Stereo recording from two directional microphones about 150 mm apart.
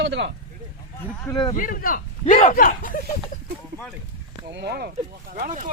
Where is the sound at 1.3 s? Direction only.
30° left (ahead or behind).